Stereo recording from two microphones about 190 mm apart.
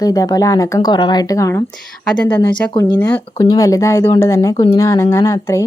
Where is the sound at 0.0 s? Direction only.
20° left (ahead or behind).